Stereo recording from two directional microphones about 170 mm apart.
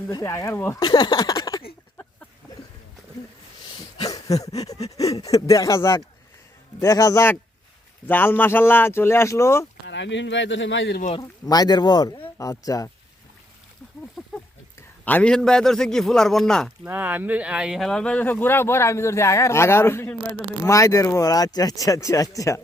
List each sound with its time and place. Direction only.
0.1 s speech: 20° left (ahead or behind)
4.4 s speech: 20° left (ahead or behind)
9.8 s speech: 90° left
11.2 s speech: 20° left (ahead or behind)
14.2 s a sound: centre (ahead or behind)
14.8 s a man's voice: 10° left (ahead or behind)
16.8 s speech: 10° right (ahead or behind); by 22.6 s 20° left (ahead or behind)